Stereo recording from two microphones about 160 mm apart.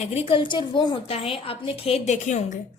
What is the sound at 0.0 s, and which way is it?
A woman's voice, 40° left (ahead or behind).